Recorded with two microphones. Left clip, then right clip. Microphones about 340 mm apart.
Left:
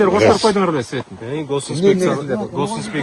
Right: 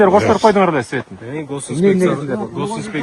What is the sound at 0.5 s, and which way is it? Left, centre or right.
Speech, centre.